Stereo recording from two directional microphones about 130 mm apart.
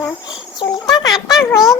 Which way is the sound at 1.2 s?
Centre (ahead or behind).